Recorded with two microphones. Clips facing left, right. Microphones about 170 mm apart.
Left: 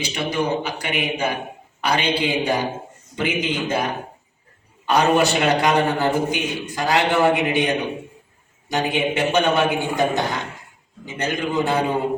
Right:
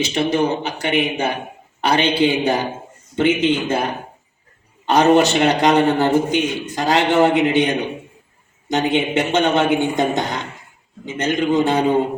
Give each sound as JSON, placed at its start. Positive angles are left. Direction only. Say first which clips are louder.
{"t": 0.2, "sound": "a man's voice", "louder": "right 4 dB", "side_deg": -25}
{"t": 4.9, "sound": "a man's voice", "louder": "right 4 dB", "side_deg": -20}
{"t": 8.7, "sound": "a man's voice", "louder": "right 4 dB", "side_deg": -20}